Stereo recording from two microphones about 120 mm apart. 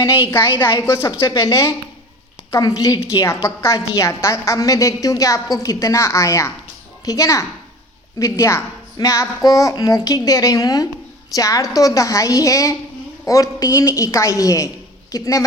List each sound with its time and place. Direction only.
0.3 s a woman's voice: 20° left (ahead or behind)